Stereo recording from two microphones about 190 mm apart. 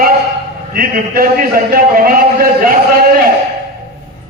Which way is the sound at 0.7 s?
50° right (ahead or behind).